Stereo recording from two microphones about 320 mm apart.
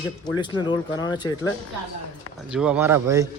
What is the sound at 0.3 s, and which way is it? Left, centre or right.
Speech, centre.